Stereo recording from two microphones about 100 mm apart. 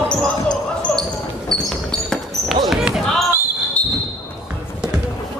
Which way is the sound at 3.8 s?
10° left (ahead or behind).